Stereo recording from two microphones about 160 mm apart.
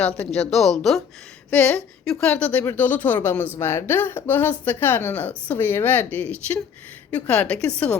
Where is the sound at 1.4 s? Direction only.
10° left (ahead or behind).